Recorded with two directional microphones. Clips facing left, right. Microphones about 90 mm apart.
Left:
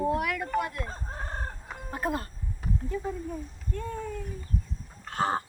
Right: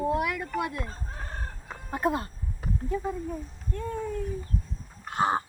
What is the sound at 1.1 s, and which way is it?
Chicken, 30° left (ahead or behind).